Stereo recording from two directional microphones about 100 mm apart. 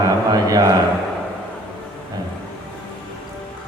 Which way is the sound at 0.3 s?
40° right (ahead or behind).